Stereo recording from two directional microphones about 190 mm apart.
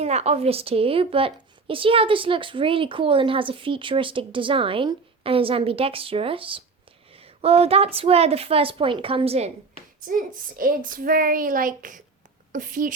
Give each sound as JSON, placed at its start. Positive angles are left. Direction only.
{"t": 0.0, "sound": "a woman's voice", "side_deg": -35}
{"t": 10.1, "sound": "a woman's voice", "side_deg": -45}